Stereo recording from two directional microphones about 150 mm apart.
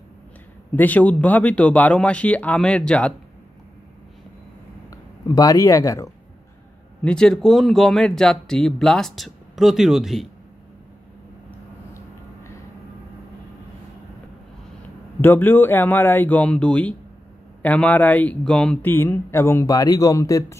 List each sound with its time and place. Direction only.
0.7 s speech: 10° left (ahead or behind)
5.3 s speech: 25° left (ahead or behind)
7.0 s speech: 5° left (ahead or behind)
15.2 s speech: 15° left (ahead or behind)